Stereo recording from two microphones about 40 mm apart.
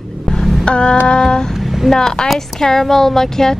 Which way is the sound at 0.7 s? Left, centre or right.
Left.